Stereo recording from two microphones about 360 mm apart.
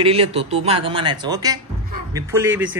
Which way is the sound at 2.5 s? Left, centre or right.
Right.